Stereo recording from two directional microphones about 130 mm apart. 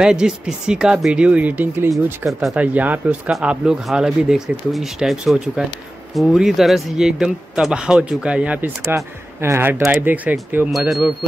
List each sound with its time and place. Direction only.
0.0 s speech: 5° right (ahead or behind)
2.2 s speech: centre (ahead or behind)
2.6 s speech: 10° right (ahead or behind)